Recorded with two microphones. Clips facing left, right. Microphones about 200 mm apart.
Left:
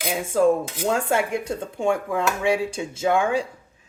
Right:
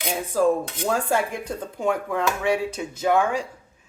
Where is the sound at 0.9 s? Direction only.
25° left (ahead or behind).